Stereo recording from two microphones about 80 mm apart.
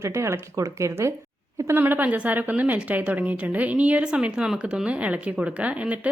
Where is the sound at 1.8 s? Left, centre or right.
Right.